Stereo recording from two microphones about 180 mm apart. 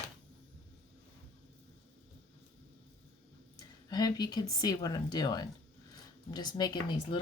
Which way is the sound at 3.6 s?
20° left (ahead or behind).